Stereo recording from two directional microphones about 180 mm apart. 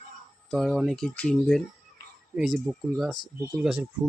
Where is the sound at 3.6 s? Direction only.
5° right (ahead or behind).